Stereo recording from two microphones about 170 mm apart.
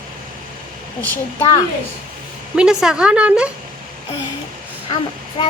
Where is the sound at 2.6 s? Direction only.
5° right (ahead or behind).